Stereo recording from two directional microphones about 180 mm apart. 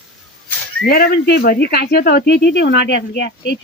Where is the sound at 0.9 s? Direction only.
60° left (ahead or behind).